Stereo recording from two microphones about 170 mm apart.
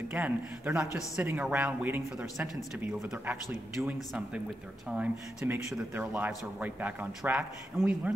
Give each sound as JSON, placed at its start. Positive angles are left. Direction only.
{"t": 0.1, "sound": "speech", "side_deg": -10}
{"t": 4.8, "sound": "speech", "side_deg": -5}
{"t": 5.4, "sound": "speech", "side_deg": -15}